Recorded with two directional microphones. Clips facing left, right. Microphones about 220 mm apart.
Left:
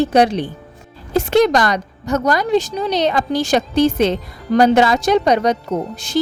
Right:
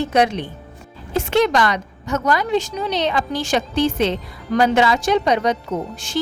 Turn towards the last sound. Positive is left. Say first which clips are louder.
# left 3 dB
turn(degrees=40)  # may be behind; listen again after turning